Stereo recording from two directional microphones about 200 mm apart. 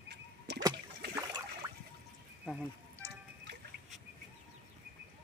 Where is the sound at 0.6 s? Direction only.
20° right (ahead or behind).